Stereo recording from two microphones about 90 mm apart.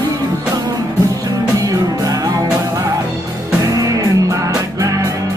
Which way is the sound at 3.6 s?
40° right (ahead or behind).